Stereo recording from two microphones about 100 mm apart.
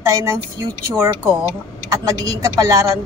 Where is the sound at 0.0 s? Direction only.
30° right (ahead or behind).